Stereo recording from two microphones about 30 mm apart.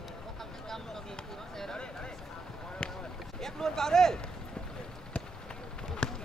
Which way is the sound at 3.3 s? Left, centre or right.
Centre.